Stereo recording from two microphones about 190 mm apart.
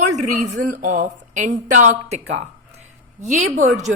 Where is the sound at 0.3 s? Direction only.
40° right (ahead or behind).